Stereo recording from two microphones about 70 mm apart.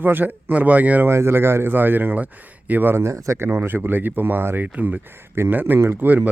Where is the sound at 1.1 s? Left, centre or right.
Right.